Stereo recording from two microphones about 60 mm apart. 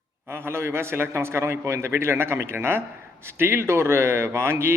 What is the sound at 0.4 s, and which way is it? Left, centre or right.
Speech, right.